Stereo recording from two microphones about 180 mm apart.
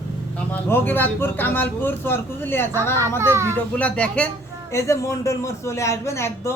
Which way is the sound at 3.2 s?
15° right (ahead or behind).